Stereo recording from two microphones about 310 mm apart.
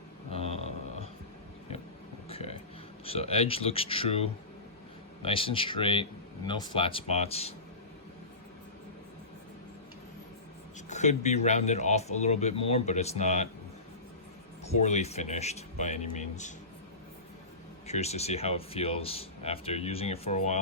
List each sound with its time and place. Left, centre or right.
0.3 s a sound: centre
2.3 s a sound: centre
3.0 s a man's voice: centre
10.8 s a man's voice: left
14.6 s a man's voice: left
17.8 s a man's voice: left